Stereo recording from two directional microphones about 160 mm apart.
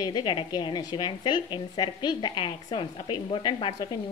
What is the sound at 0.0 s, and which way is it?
A woman's voice, 30° left (ahead or behind).